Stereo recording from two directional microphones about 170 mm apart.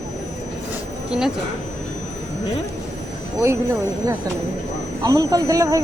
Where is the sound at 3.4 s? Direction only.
15° right (ahead or behind).